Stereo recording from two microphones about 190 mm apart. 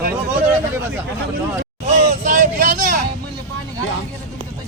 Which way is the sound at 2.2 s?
45° right (ahead or behind).